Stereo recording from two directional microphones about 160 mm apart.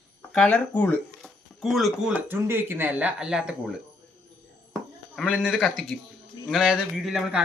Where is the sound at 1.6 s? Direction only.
Centre (ahead or behind).